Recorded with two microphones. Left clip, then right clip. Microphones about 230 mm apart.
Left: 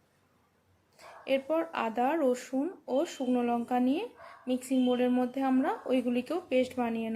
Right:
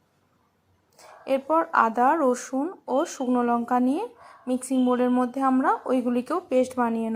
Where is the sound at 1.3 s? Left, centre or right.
Centre.